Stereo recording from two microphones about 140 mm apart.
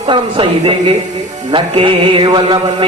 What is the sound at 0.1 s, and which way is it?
Mantra, 40° right (ahead or behind).